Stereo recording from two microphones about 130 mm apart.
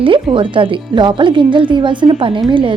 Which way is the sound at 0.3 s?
40° right (ahead or behind).